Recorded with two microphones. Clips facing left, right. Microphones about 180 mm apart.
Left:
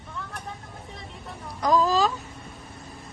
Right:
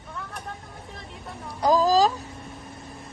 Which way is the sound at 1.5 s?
35° right (ahead or behind).